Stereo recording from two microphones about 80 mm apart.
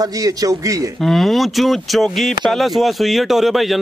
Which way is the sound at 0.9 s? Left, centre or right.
Centre.